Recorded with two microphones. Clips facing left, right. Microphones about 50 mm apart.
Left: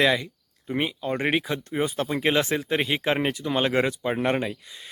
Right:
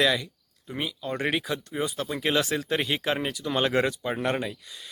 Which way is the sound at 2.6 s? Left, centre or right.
Centre.